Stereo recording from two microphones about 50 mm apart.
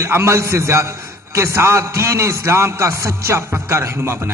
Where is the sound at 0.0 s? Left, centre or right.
Right.